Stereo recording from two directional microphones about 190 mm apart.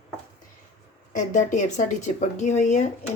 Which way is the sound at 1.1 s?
45° left (ahead or behind).